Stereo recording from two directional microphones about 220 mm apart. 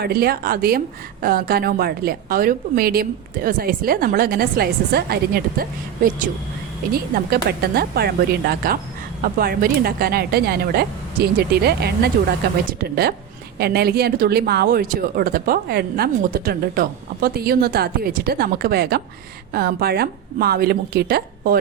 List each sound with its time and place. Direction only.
0.0 s speech: 45° right (ahead or behind)